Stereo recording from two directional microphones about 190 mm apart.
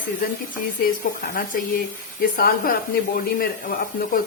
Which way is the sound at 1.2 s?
50° left (ahead or behind).